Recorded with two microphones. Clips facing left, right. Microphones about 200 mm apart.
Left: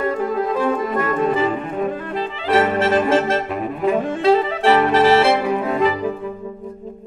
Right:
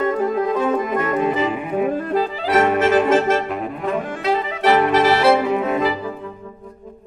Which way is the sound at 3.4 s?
Centre (ahead or behind).